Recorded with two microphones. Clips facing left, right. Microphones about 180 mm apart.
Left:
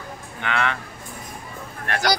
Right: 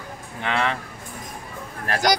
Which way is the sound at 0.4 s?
30° right (ahead or behind).